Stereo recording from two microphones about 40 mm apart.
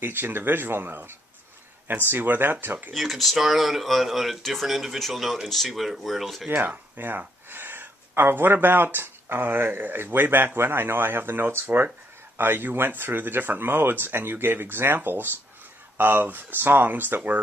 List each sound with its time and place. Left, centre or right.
0.0 s speech: right
2.9 s speech: centre
6.5 s speech: right
15.0 s speech: right